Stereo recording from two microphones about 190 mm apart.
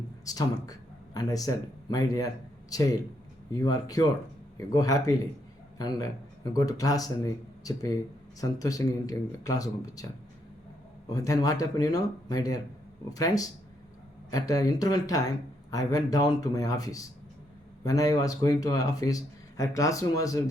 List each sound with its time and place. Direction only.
0.3 s speech: 20° left (ahead or behind)
11.1 s speech: 20° left (ahead or behind)